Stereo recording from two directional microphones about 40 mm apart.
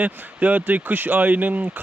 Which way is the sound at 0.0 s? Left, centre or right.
Right.